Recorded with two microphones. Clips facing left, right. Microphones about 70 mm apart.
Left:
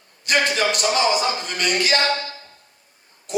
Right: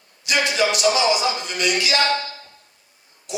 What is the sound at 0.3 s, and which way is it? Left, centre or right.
Speech, left.